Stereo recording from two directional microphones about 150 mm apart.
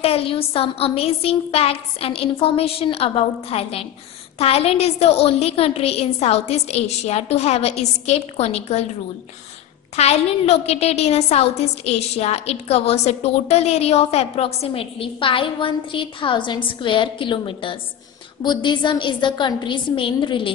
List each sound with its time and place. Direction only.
0.0 s a woman's voice: 40° left (ahead or behind)
9.9 s a woman's voice: 45° left (ahead or behind)